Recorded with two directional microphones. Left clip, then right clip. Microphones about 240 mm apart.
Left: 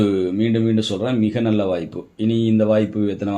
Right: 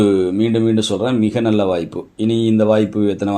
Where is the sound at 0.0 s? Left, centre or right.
Right.